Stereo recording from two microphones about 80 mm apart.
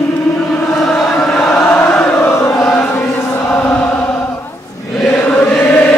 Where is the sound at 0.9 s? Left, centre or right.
Centre.